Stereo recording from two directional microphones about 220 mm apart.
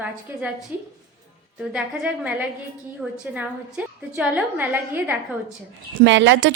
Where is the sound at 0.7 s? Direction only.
10° right (ahead or behind).